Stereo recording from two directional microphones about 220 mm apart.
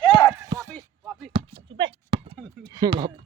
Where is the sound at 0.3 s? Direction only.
15° right (ahead or behind).